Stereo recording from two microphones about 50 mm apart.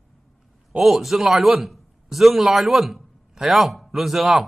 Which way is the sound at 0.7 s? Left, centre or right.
Centre.